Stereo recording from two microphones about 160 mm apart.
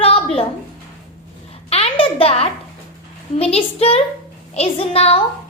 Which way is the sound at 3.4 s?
40° left (ahead or behind).